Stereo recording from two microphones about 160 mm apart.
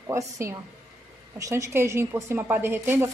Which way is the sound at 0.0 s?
20° right (ahead or behind).